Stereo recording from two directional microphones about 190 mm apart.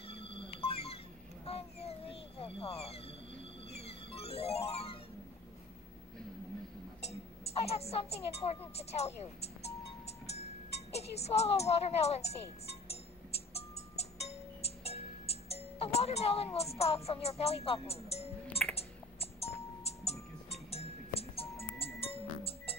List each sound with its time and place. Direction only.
0.1 s a sound: 30° left (ahead or behind)
1.4 s cat: 30° left (ahead or behind)
3.7 s music: 30° left (ahead or behind)
7.6 s speech: 30° left (ahead or behind)
10.2 s speech: 35° left (ahead or behind)
13.5 s music: 30° left (ahead or behind)
16.5 s speech: 35° left (ahead or behind)
18.8 s music: 30° left (ahead or behind)